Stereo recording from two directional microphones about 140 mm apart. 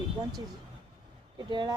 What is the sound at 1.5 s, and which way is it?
Speech, 35° right (ahead or behind).